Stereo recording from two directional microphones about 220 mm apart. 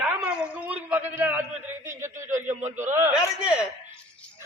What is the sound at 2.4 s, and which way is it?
Speech, 35° right (ahead or behind).